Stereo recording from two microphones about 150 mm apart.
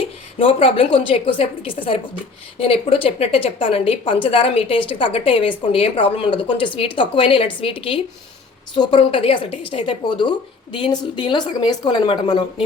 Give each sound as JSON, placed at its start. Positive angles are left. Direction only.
{"t": 0.0, "sound": "a woman's voice", "side_deg": 40}